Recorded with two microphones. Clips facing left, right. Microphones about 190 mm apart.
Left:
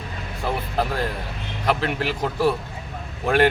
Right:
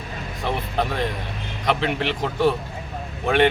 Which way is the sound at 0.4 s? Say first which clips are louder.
Even; 5° left (ahead or behind).